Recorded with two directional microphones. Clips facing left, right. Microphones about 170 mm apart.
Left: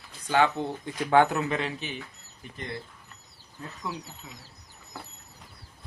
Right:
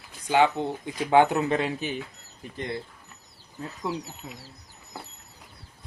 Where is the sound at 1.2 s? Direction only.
25° right (ahead or behind).